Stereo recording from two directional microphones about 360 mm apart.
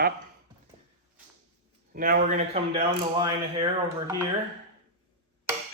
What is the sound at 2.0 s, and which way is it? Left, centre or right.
Speech, right.